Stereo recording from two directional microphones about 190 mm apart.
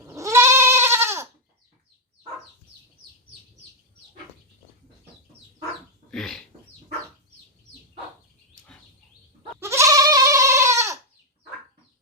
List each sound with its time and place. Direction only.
0.0 s goat: 15° right (ahead or behind)
6.1 s bird: centre (ahead or behind)
9.6 s goat: 15° right (ahead or behind)